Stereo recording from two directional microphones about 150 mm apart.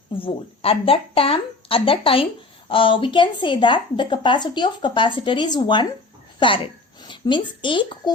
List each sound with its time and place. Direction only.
0.1 s speech: 35° left (ahead or behind)
7.0 s speech: 30° left (ahead or behind)